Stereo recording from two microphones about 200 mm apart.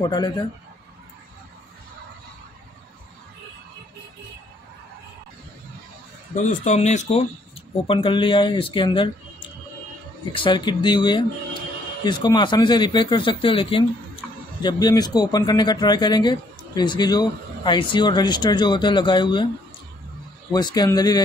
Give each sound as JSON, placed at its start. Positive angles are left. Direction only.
{"t": 0.0, "sound": "speech", "side_deg": 20}
{"t": 6.3, "sound": "speech", "side_deg": 35}
{"t": 10.3, "sound": "speech", "side_deg": 25}
{"t": 20.5, "sound": "speech", "side_deg": 20}